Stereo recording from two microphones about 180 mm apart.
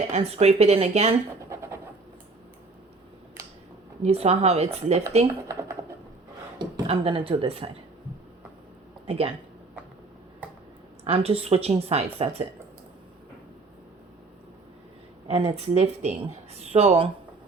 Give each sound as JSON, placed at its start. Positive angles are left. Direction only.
{"t": 0.1, "sound": "speech", "side_deg": -35}
{"t": 1.5, "sound": "a sound", "side_deg": -15}
{"t": 4.0, "sound": "speech", "side_deg": -35}
{"t": 6.6, "sound": "speech", "side_deg": -25}
{"t": 9.0, "sound": "speech", "side_deg": -30}
{"t": 11.0, "sound": "speech", "side_deg": -35}
{"t": 15.3, "sound": "speech", "side_deg": -35}